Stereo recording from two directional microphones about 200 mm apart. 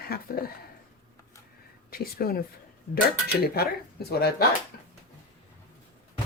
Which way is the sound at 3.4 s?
50° left (ahead or behind).